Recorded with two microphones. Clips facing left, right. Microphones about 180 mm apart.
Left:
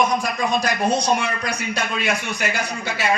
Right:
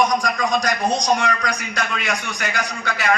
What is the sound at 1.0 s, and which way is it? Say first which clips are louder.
A man's voice: right 2 dB; 25° left (ahead or behind).